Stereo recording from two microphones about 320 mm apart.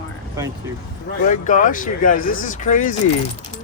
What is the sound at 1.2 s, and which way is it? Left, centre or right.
Speech, left.